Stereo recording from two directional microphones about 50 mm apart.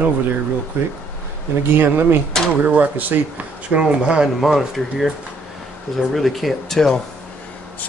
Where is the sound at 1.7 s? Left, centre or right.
Right.